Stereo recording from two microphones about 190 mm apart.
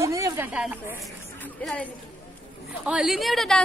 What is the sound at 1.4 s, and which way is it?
Speech, 5° left (ahead or behind).